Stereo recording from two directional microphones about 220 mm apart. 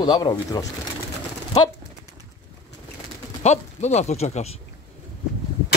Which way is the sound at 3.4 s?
30° left (ahead or behind).